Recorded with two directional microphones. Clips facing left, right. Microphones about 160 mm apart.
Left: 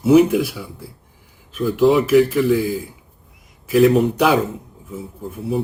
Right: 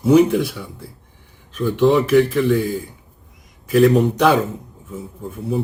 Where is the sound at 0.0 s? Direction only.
5° left (ahead or behind).